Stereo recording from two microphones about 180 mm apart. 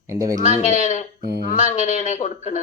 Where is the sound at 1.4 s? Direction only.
45° left (ahead or behind).